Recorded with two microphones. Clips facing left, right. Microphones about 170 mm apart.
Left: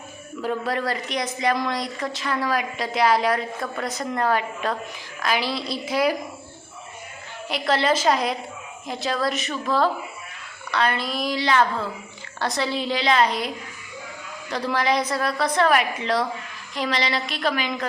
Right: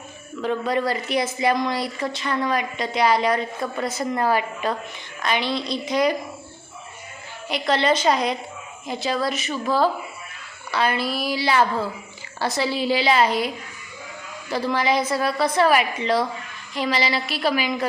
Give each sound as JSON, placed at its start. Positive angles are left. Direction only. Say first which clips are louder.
{"t": 0.4, "sound": "a woman's voice", "louder": "right 3 dB", "side_deg": 0}
{"t": 7.4, "sound": "a woman's voice", "louder": "right 1 dB", "side_deg": 0}
{"t": 14.5, "sound": "a woman's voice", "louder": "right 1 dB", "side_deg": 0}